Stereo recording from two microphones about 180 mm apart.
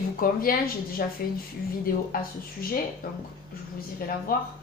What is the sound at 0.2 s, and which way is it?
Speech, 55° left (ahead or behind).